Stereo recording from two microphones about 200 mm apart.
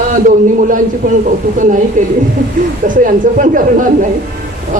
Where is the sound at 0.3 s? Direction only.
40° right (ahead or behind).